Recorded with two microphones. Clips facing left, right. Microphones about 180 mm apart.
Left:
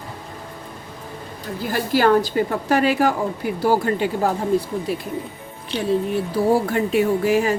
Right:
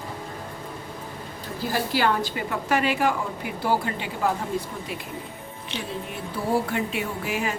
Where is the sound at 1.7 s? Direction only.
45° left (ahead or behind).